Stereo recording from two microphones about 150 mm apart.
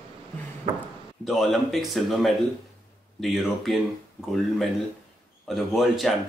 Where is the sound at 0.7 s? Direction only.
55° right (ahead or behind).